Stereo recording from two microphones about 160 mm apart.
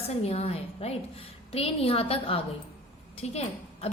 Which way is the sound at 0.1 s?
40° left (ahead or behind).